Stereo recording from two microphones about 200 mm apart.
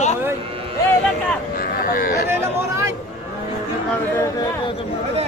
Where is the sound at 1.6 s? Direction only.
50° left (ahead or behind).